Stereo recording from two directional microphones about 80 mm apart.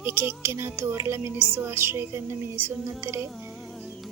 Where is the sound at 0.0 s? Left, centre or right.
Right.